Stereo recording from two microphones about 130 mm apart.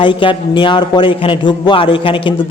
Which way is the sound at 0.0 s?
40° left (ahead or behind).